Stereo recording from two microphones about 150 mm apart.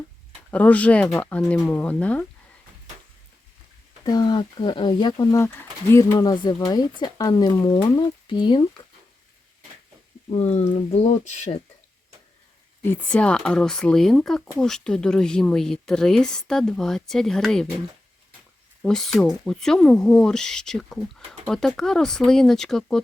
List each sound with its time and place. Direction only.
0.5 s speech: 10° left (ahead or behind)
4.0 s speech: 30° left (ahead or behind)
6.1 s speech: 30° left (ahead or behind)
10.7 s speech: 40° left (ahead or behind)
12.8 s speech: 10° left (ahead or behind)
18.8 s speech: 5° left (ahead or behind)